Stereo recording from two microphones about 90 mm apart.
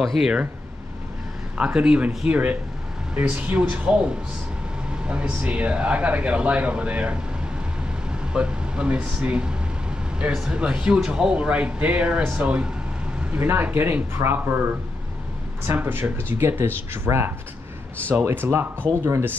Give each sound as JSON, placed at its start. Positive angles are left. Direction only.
{"t": 0.0, "sound": "speech", "side_deg": 0}
{"t": 1.6, "sound": "speech", "side_deg": -10}
{"t": 8.3, "sound": "speech", "side_deg": -10}
{"t": 15.6, "sound": "speech", "side_deg": -25}